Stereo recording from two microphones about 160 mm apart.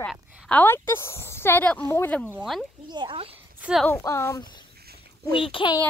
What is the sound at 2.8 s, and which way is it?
Speech, 30° right (ahead or behind).